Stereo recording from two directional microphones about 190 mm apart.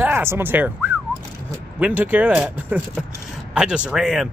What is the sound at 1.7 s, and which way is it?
Speech, 5° right (ahead or behind).